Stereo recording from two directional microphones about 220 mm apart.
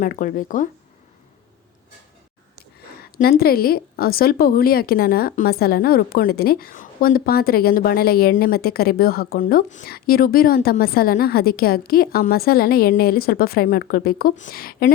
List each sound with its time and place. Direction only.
0.0 s speech: 40° left (ahead or behind)
3.0 s a woman's voice: 45° left (ahead or behind)